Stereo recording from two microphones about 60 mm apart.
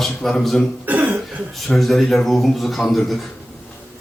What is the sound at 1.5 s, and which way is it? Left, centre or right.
A man's voice, centre.